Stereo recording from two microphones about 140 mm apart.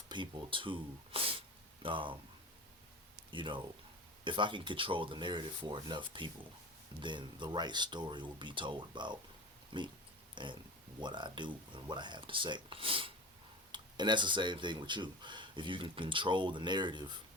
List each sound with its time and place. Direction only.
0.1 s speech: 35° right (ahead or behind)
3.3 s speech: 35° right (ahead or behind)